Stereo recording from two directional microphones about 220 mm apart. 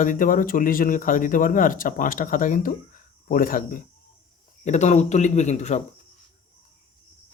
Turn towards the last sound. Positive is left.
turn(degrees=30)  # may be behind; listen again after turning